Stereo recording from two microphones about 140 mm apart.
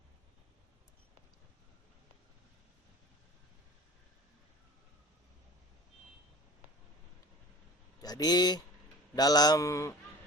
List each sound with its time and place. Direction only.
8.0 s speech: 30° left (ahead or behind)